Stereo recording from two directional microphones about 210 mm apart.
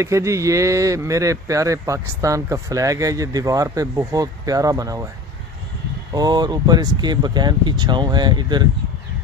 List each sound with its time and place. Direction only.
0.0 s speech: 15° right (ahead or behind)
6.1 s speech: 20° right (ahead or behind)